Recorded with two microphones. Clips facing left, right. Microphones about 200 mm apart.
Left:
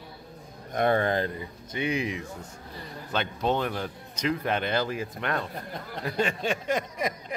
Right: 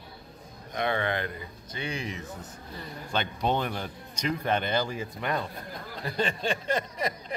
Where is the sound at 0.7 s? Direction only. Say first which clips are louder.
Left 5 dB; 45° left (ahead or behind).